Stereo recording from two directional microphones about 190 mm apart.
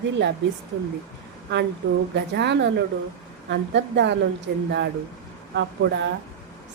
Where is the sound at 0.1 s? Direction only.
70° right (ahead or behind).